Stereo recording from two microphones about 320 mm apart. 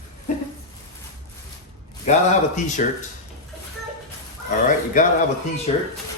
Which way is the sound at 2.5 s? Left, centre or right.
Left.